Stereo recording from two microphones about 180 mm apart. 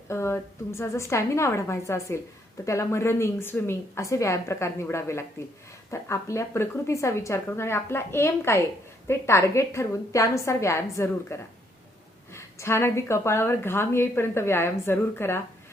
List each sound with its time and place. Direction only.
0.1 s a woman's voice: 15° left (ahead or behind)